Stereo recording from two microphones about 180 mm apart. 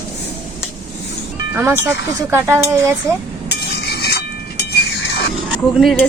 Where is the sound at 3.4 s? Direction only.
65° left (ahead or behind).